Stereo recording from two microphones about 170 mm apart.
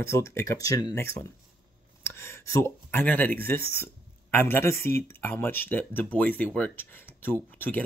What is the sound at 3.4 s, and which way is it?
Speech, 15° left (ahead or behind).